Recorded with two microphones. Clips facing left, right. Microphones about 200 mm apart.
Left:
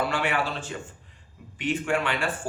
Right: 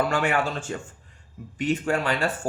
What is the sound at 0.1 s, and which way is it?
Speech, 45° right (ahead or behind).